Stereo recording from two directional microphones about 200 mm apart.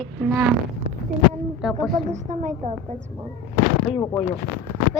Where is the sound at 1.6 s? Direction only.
5° right (ahead or behind).